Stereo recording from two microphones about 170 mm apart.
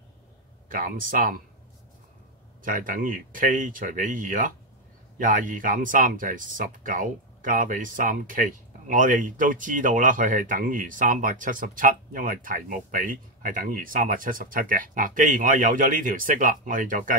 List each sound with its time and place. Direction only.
0.7 s speech: 55° right (ahead or behind)
2.6 s speech: 55° right (ahead or behind)